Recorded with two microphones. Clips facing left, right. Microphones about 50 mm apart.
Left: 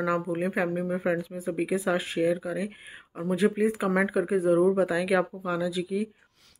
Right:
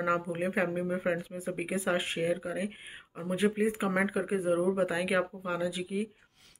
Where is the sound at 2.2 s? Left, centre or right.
Right.